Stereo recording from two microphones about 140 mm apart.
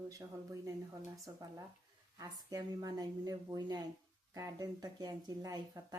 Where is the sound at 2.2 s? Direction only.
25° right (ahead or behind).